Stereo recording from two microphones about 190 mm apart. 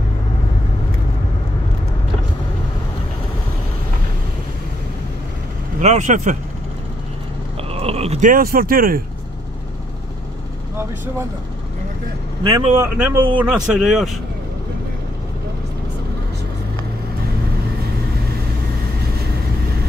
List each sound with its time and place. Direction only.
5.8 s speech: 40° right (ahead or behind)
7.7 s speech: 30° right (ahead or behind); by 9.0 s 50° right (ahead or behind)
12.4 s speech: 25° right (ahead or behind)
12.7 s speech: 10° right (ahead or behind)